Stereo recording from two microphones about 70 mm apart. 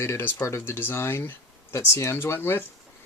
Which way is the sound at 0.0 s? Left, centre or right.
Left.